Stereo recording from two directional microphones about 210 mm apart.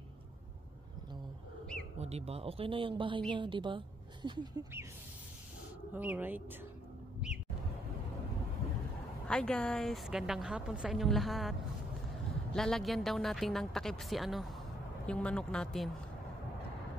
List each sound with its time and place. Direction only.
2.0 s a woman's voice: 30° right (ahead or behind)
5.9 s speech: 10° right (ahead or behind)
9.3 s a woman's voice: 5° left (ahead or behind)
12.5 s a woman's voice: centre (ahead or behind)